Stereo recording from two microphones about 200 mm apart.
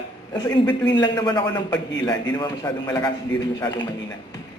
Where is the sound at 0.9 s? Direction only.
20° left (ahead or behind).